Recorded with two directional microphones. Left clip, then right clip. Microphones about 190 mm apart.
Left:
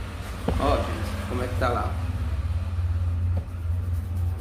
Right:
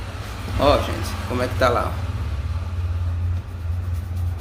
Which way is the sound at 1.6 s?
35° right (ahead or behind).